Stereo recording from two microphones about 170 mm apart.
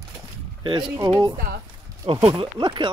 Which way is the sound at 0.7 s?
30° right (ahead or behind).